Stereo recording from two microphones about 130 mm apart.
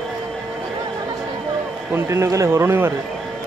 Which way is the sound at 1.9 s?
20° right (ahead or behind).